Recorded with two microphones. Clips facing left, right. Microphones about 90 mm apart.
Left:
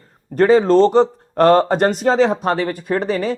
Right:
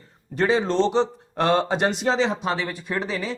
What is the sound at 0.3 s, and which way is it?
Speech, 45° left (ahead or behind).